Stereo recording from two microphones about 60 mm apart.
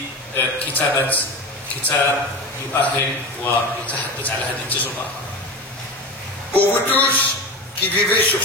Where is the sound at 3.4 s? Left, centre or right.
Left.